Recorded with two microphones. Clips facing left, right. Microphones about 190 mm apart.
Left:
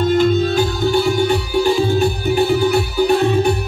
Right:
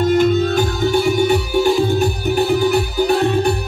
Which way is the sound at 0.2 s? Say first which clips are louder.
Even; 10° right (ahead or behind).